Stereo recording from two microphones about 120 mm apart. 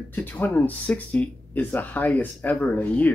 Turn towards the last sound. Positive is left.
turn(degrees=15)  # may be behind; listen again after turning